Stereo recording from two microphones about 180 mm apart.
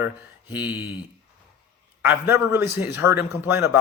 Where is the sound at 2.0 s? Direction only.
10° right (ahead or behind).